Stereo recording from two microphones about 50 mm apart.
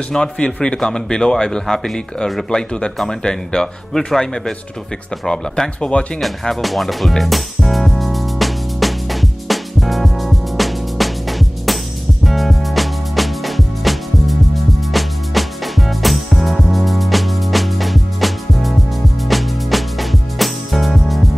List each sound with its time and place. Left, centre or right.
0.1 s speech: centre
6.4 s music: centre